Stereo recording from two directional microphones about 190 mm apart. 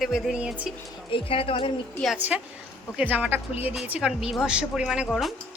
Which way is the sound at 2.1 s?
10° right (ahead or behind).